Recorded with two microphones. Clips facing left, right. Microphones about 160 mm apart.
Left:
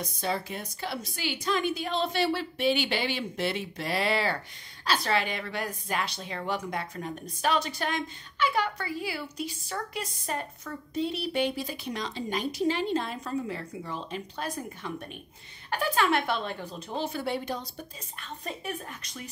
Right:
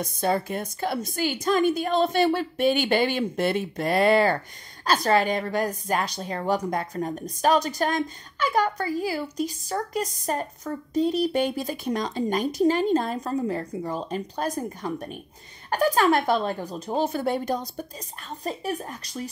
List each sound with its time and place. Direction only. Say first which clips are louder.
0.0 s a woman's voice: right 7 dB; 50° right (ahead or behind)